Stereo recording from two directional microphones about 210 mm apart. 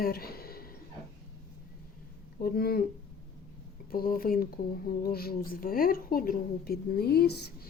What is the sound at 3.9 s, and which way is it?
Speech, 45° left (ahead or behind).